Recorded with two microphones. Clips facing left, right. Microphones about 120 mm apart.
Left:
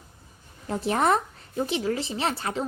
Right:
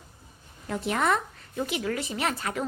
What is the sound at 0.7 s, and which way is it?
A woman's voice, 35° left (ahead or behind).